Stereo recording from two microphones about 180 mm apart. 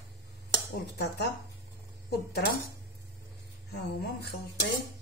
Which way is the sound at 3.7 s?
65° left (ahead or behind).